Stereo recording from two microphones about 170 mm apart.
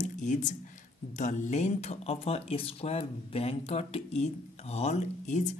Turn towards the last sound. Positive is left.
turn(degrees=45)  # may be behind; listen again after turning